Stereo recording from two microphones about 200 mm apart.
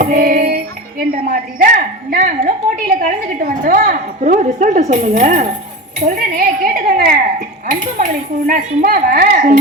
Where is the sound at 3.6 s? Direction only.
40° right (ahead or behind).